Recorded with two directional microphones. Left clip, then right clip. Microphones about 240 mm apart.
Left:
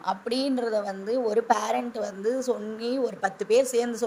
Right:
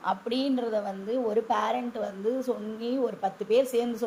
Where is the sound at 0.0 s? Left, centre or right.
Left.